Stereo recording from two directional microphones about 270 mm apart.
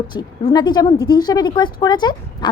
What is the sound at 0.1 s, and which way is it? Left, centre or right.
Speech, centre.